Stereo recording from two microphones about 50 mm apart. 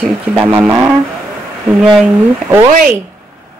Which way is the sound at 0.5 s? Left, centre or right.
Right.